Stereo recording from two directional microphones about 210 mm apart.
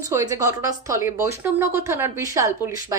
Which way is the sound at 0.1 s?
15° right (ahead or behind).